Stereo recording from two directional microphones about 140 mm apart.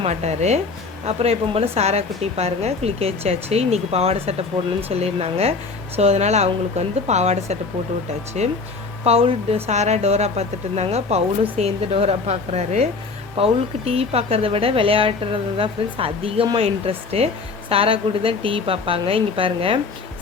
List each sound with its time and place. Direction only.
0.0 s a woman's voice: 50° right (ahead or behind)